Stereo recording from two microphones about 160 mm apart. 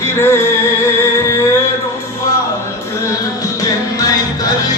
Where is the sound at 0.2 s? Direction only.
15° left (ahead or behind).